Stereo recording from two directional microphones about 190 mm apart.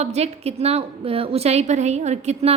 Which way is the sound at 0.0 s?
35° right (ahead or behind).